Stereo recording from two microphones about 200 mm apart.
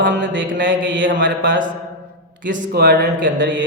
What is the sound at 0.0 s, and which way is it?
Speech, 65° right (ahead or behind).